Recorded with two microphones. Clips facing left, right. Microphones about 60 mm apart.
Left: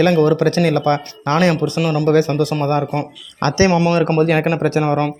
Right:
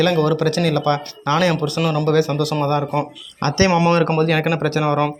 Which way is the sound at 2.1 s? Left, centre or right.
Left.